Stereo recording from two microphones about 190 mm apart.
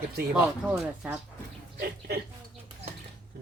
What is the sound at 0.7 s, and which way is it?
Speech, 10° right (ahead or behind).